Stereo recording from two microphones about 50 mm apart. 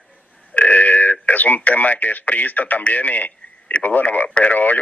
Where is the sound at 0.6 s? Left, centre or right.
Left.